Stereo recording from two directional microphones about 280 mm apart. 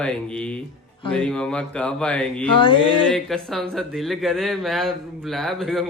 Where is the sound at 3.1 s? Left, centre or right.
Centre.